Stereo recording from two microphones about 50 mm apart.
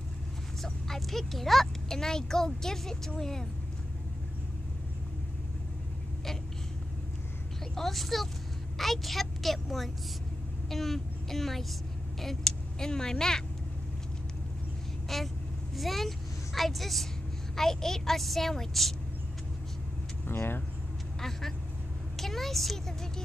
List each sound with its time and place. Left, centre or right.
0.6 s speech: centre
7.7 s a woman's voice: centre
10.7 s vehicle: centre
12.2 s speech: centre
15.1 s a woman's voice: centre
20.2 s speech: left
21.2 s vehicle: centre
22.2 s a woman's voice: centre